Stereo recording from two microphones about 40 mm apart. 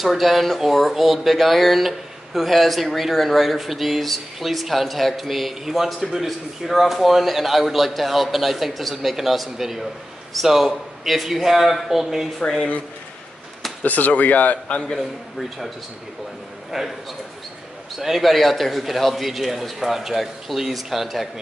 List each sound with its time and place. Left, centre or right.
0.0 s a man's voice: centre
12.4 s speech: centre
13.8 s speech: left
16.7 s speech: centre
17.9 s speech: centre